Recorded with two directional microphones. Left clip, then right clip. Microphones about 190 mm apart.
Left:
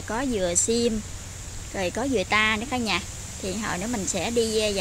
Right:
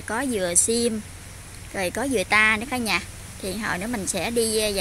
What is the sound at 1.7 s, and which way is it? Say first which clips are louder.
Speech: right 1 dB; 10° right (ahead or behind).